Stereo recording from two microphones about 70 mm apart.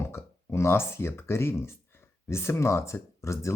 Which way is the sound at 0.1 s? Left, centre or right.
Left.